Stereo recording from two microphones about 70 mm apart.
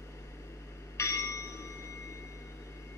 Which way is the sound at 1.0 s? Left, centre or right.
Left.